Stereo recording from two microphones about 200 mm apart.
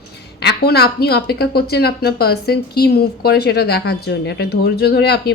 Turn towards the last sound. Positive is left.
turn(degrees=55)  # may be behind; listen again after turning